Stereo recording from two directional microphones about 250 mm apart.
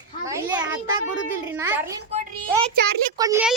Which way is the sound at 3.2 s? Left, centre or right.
Centre.